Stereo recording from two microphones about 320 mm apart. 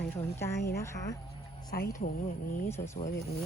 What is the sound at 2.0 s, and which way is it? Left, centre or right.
Speech, left.